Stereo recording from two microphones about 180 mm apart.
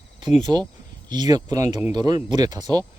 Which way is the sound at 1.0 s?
25° right (ahead or behind).